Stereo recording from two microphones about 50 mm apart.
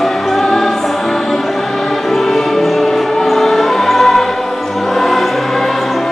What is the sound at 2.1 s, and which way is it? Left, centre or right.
Music, centre.